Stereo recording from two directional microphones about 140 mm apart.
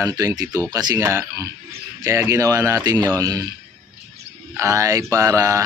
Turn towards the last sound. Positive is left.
turn(degrees=-25)  # may be behind; listen again after turning